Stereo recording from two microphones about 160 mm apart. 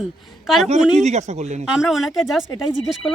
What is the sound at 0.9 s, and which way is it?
Speech, 45° right (ahead or behind).